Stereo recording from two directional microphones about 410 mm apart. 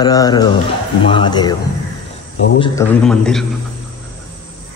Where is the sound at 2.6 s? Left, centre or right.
Centre.